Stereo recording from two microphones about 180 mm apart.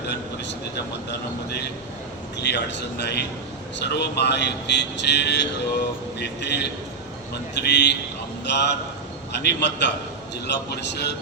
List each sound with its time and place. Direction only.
2.4 s speech: 70° left (ahead or behind)